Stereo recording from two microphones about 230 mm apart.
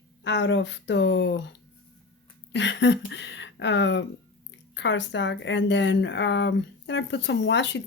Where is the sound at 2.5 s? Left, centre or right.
Left.